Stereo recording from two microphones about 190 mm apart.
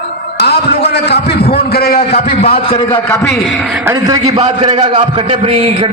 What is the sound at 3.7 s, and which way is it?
Speech, 15° right (ahead or behind).